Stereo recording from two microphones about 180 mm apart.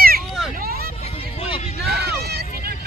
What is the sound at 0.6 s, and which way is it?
Vehicle, 55° right (ahead or behind).